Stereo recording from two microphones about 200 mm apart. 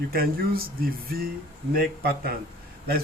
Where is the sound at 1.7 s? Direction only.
50° right (ahead or behind).